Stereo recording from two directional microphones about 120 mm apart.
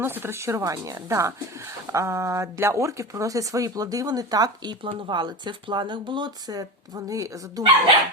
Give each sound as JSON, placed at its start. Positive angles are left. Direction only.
{"t": 0.0, "sound": "speech", "side_deg": -20}
{"t": 4.8, "sound": "speech", "side_deg": -45}